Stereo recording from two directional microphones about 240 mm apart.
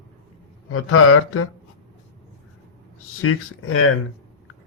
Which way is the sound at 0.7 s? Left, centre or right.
Left.